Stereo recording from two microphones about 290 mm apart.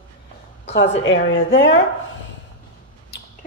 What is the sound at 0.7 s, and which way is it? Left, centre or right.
Speech, left.